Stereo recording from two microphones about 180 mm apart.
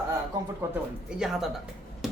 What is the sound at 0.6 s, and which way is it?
Speech, 15° right (ahead or behind).